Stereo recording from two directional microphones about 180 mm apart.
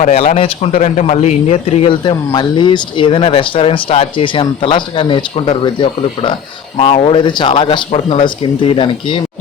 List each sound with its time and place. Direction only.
0.0 s a man's voice: 40° left (ahead or behind)